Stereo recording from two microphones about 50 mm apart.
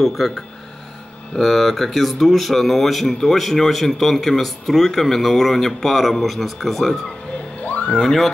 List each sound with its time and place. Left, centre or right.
0.0 s speech: centre
1.3 s speech: centre
7.6 s a sound: left
8.0 s speech: centre